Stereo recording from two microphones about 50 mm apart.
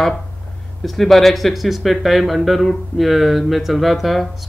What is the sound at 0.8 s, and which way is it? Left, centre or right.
Speech, centre.